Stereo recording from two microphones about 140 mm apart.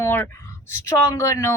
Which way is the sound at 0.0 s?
15° left (ahead or behind).